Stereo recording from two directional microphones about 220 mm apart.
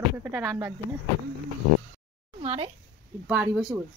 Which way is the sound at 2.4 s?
30° right (ahead or behind).